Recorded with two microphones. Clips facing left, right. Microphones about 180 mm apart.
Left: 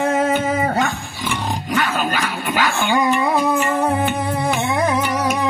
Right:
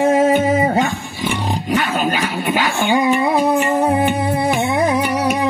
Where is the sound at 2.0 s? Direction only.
20° right (ahead or behind).